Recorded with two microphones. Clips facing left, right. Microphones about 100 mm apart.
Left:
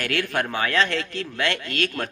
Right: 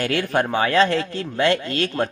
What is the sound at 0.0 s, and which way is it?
Speech, 30° right (ahead or behind).